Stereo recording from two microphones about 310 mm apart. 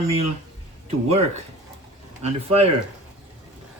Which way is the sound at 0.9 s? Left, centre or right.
Right.